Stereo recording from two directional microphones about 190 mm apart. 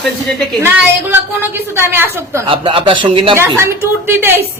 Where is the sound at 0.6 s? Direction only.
10° right (ahead or behind).